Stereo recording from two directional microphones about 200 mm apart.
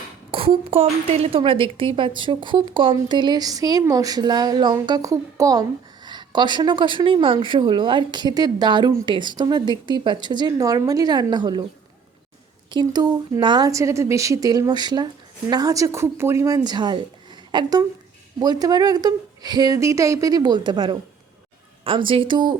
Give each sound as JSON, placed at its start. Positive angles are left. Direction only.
{"t": 0.3, "sound": "a woman's voice", "side_deg": -30}
{"t": 12.7, "sound": "a woman's voice", "side_deg": -20}